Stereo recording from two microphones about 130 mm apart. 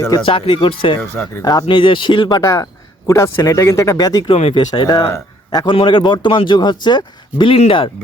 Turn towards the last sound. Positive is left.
turn(degrees=40)  # may be behind; listen again after turning